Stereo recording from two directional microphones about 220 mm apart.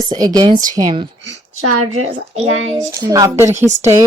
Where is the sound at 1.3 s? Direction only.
75° right (ahead or behind).